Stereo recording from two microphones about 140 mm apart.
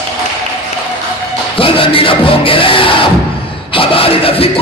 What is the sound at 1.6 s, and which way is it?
Music, 40° left (ahead or behind).